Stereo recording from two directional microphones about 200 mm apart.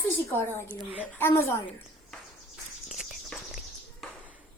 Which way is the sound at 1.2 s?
10° left (ahead or behind).